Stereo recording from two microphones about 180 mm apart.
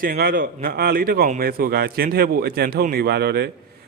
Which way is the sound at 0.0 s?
55° right (ahead or behind).